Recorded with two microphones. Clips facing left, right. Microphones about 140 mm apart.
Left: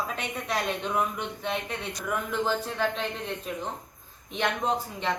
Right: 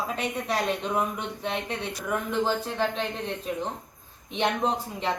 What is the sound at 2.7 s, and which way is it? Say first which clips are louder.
Speech: right 1 dB; 30° right (ahead or behind).